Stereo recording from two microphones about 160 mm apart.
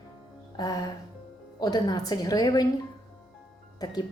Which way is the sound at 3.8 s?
25° left (ahead or behind).